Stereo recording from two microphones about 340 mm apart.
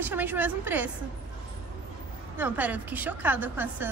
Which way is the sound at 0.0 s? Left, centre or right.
Centre.